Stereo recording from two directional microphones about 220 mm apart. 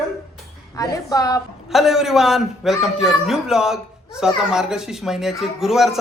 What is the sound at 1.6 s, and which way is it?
A man's voice, centre (ahead or behind).